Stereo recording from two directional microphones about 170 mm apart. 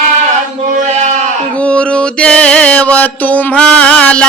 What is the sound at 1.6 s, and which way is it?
Mantra, 5° left (ahead or behind).